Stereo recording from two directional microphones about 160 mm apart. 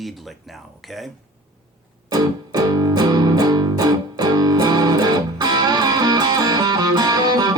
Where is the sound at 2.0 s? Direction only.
25° right (ahead or behind).